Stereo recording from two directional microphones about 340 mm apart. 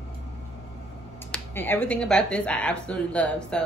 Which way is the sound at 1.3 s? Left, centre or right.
Centre.